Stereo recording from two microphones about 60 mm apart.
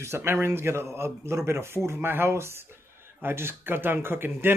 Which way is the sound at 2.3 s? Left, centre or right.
Right.